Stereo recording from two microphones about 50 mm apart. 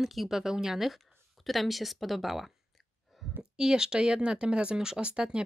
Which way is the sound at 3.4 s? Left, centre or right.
Centre.